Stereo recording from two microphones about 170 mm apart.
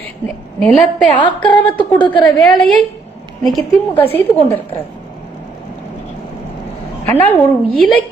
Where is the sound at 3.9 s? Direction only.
10° left (ahead or behind).